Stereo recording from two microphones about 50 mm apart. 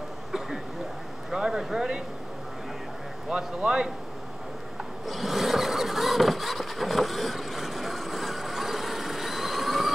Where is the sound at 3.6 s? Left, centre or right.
Centre.